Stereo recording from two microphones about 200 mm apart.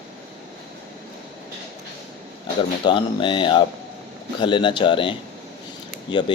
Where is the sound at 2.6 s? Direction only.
25° left (ahead or behind).